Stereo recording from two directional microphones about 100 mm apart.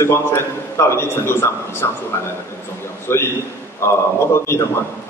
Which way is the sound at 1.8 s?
30° left (ahead or behind).